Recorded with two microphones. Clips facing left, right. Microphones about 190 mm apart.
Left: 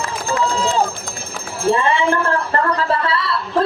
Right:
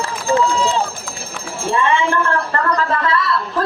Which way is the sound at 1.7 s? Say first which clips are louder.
Right 2 dB; 35° left (ahead or behind).